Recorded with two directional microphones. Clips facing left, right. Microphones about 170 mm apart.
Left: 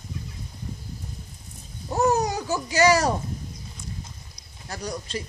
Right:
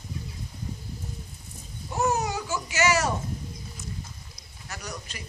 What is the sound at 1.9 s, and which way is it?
Babbling, 35° left (ahead or behind).